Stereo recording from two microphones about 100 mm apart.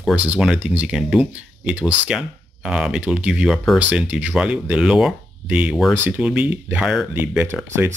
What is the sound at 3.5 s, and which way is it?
Speech, 5° left (ahead or behind).